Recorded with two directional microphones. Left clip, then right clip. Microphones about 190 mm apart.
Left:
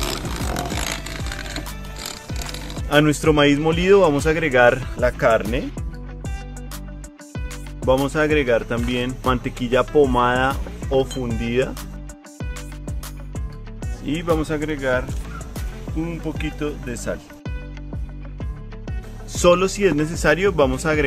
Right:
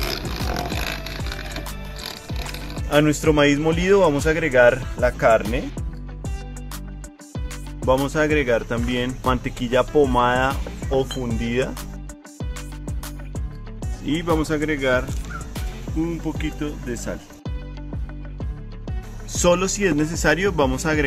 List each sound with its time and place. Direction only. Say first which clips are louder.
0.0 s music: left 1 dB; 20° left (ahead or behind)
2.3 s speech: left 1 dB; 25° left (ahead or behind)
8.1 s speech: left 1 dB; 15° left (ahead or behind)
12.4 s music: left 1 dB; centre (ahead or behind)
14.2 s speech: left 1 dB; centre (ahead or behind)
14.7 s speech: right 1 dB; 15° right (ahead or behind)
16.0 s speech: right 1 dB; 30° left (ahead or behind)
19.3 s speech: left 3 dB; 20° left (ahead or behind)